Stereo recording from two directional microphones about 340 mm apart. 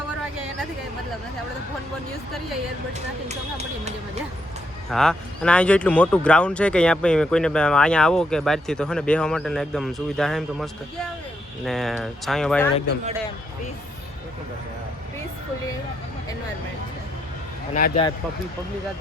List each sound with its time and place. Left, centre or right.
3.2 s speech: centre
4.9 s speech: centre
17.7 s speech: left